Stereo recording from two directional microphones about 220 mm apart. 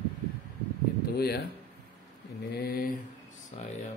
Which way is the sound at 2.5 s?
45° left (ahead or behind).